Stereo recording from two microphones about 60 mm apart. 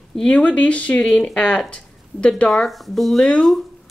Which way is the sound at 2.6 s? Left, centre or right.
Centre.